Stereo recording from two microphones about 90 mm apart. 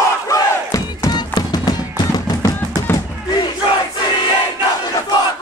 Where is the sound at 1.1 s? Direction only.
50° left (ahead or behind).